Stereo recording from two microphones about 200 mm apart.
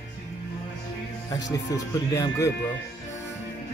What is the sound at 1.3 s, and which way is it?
Speech, 15° left (ahead or behind).